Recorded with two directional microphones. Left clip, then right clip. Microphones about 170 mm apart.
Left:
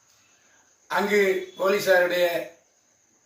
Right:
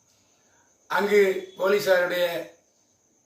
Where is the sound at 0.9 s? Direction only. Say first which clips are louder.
Right 1 dB; 10° right (ahead or behind).